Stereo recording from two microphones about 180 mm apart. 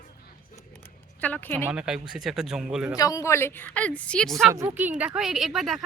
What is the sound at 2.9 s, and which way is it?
A woman's voice, 20° left (ahead or behind).